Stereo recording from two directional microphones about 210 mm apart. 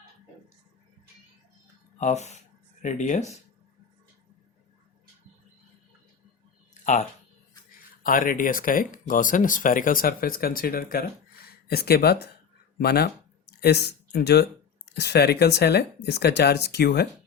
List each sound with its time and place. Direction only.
2.0 s speech: 35° left (ahead or behind)
7.8 s speech: 40° left (ahead or behind)